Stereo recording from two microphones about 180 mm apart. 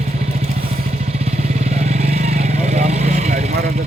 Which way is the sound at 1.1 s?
35° right (ahead or behind).